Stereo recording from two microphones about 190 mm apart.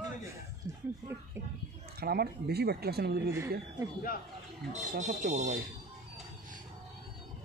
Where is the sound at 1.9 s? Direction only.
55° right (ahead or behind).